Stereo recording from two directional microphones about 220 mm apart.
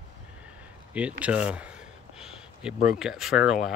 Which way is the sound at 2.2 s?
Centre (ahead or behind).